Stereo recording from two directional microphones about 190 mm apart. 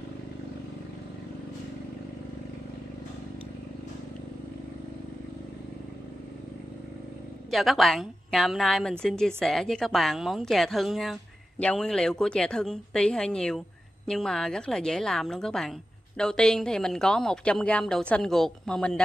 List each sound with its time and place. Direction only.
7.5 s a woman's voice: centre (ahead or behind)